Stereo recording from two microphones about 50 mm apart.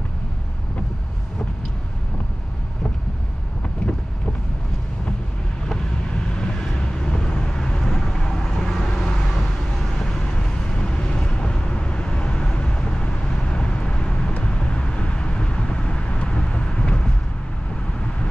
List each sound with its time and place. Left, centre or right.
6.3 s vehicle: centre